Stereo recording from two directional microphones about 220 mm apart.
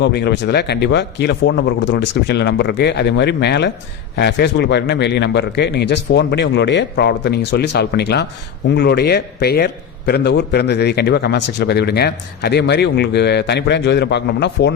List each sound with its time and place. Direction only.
0.0 s a man's voice: 50° left (ahead or behind)